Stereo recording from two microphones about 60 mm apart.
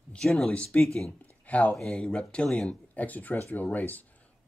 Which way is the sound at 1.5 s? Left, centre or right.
Left.